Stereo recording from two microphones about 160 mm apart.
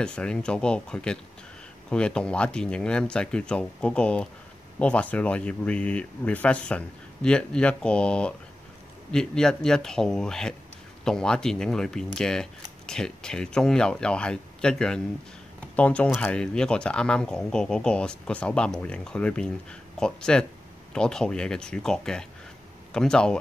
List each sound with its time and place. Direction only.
0.0 s speech: 5° left (ahead or behind)